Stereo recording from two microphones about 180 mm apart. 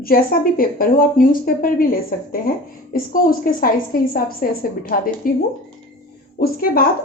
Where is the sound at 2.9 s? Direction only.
50° left (ahead or behind).